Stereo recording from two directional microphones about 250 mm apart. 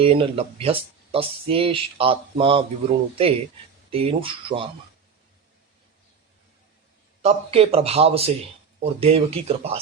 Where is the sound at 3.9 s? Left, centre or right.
Right.